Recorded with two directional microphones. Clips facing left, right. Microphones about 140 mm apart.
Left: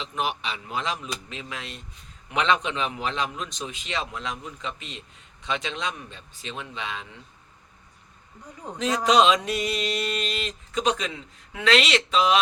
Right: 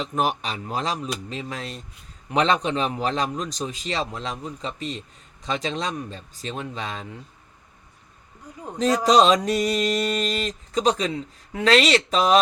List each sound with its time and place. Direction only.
0.0 s a man's voice: 45° right (ahead or behind)
9.0 s a man's voice: 40° right (ahead or behind)